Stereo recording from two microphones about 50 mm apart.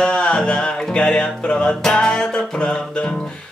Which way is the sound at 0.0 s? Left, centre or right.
Left.